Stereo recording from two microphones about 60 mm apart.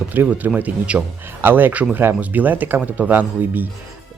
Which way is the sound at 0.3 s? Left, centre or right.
Right.